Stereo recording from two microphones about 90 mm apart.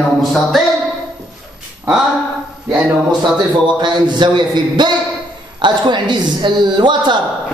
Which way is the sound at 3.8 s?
55° right (ahead or behind).